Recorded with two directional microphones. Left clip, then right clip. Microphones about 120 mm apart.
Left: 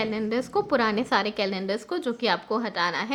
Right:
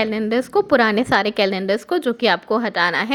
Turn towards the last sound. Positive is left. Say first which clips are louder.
# right 8 dB
turn(degrees=-55)  # may be behind; listen again after turning